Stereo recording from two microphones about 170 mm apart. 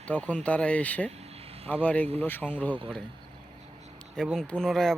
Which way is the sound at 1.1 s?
35° right (ahead or behind).